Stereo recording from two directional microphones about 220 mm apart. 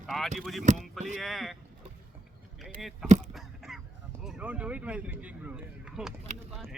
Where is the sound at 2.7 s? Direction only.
Centre (ahead or behind).